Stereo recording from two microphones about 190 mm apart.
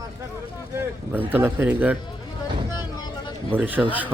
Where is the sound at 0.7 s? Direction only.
10° right (ahead or behind).